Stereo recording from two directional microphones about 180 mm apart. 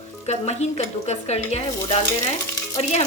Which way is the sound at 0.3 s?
35° left (ahead or behind).